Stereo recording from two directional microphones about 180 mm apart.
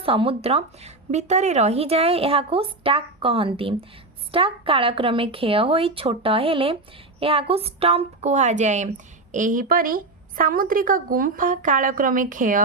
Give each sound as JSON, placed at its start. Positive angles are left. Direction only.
{"t": 0.0, "sound": "a woman's voice", "side_deg": -30}